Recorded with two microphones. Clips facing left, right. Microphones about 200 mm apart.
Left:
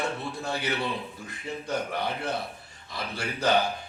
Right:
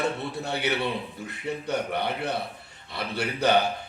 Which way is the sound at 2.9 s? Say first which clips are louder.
Right 4 dB; 65° right (ahead or behind).